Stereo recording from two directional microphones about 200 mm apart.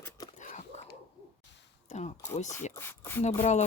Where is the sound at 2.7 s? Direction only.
10° left (ahead or behind).